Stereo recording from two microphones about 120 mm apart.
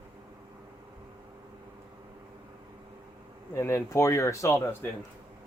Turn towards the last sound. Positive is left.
turn(degrees=20)  # may be behind; listen again after turning